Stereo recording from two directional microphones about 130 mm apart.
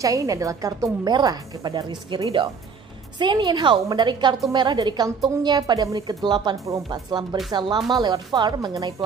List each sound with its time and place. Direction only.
0.0 s a woman's voice: 25° right (ahead or behind)